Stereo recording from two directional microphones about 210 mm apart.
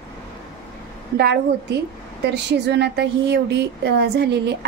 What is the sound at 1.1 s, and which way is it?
Speech, 50° right (ahead or behind).